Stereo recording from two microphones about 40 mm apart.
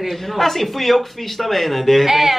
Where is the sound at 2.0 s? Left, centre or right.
Centre.